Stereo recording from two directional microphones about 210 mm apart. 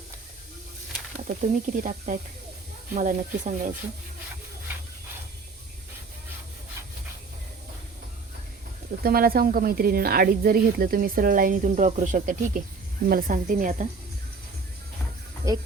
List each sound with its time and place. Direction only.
1.4 s speech: 35° right (ahead or behind)
9.0 s speech: 45° right (ahead or behind)
15.5 s speech: 15° right (ahead or behind)